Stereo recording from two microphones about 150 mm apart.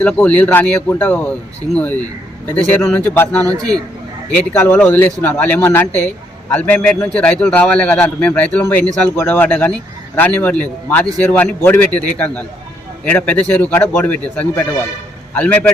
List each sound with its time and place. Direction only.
0.0 s a man's voice: 10° left (ahead or behind)
3.4 s a man's voice: 25° right (ahead or behind)
4.3 s a man's voice: 10° left (ahead or behind)